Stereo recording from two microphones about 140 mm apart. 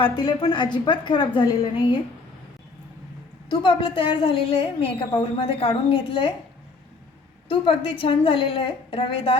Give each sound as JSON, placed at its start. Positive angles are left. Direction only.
{"t": 0.0, "sound": "a woman's voice", "side_deg": 35}
{"t": 3.5, "sound": "a woman's voice", "side_deg": 35}
{"t": 7.4, "sound": "a woman's voice", "side_deg": 35}